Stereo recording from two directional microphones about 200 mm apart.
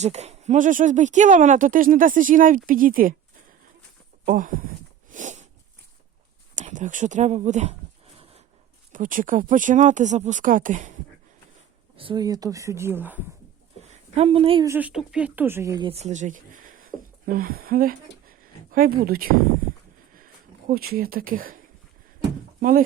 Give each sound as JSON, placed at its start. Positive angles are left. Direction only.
{"t": 0.0, "sound": "speech", "side_deg": -35}
{"t": 4.3, "sound": "speech", "side_deg": -40}
{"t": 5.1, "sound": "a sound", "side_deg": -35}
{"t": 6.6, "sound": "speech", "side_deg": -40}
{"t": 8.9, "sound": "speech", "side_deg": -40}
{"t": 11.9, "sound": "speech", "side_deg": -20}
{"t": 13.8, "sound": "speech", "side_deg": -35}
{"t": 14.7, "sound": "speech", "side_deg": -5}
{"t": 15.9, "sound": "speech", "side_deg": -35}
{"t": 20.7, "sound": "speech", "side_deg": -45}